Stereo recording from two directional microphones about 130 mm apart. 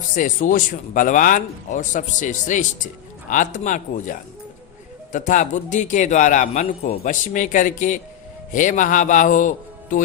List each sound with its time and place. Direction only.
0.2 s a man's voice: 85° left